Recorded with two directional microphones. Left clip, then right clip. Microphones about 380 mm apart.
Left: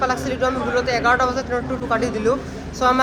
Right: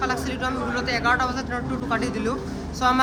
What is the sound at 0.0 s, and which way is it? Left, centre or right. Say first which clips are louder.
A woman's voice: left 5 dB; centre.